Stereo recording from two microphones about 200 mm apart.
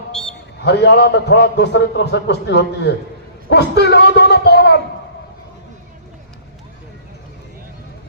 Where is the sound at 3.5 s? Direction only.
60° left (ahead or behind).